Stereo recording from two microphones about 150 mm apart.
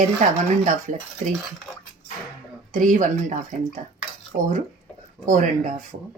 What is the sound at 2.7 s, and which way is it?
Speech, 60° right (ahead or behind).